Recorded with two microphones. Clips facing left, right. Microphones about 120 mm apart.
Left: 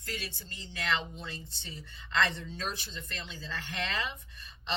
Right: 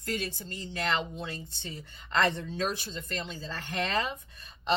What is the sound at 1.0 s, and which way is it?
Speech, 55° right (ahead or behind).